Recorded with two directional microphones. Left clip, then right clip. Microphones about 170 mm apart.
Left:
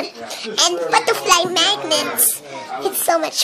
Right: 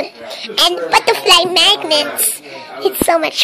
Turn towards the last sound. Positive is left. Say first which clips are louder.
# right 4 dB
turn(degrees=-15)  # may be behind; listen again after turning